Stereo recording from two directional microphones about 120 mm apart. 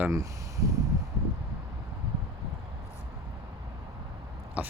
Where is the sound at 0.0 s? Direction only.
25° right (ahead or behind).